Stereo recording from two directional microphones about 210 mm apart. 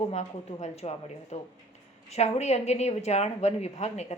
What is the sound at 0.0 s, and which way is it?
A woman's voice, 35° left (ahead or behind).